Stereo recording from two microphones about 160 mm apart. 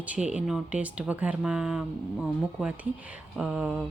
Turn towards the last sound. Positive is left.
turn(degrees=-5)  # may be behind; listen again after turning